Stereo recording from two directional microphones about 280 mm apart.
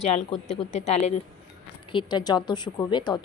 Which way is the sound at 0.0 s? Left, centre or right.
Left.